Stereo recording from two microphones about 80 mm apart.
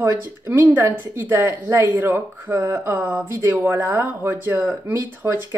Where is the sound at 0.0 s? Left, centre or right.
Right.